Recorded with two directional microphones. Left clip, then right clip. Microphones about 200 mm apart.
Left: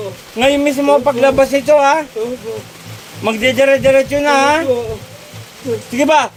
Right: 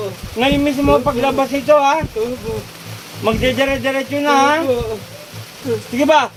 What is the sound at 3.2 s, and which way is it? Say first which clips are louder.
A man's voice: left 4 dB; 55° left (ahead or behind).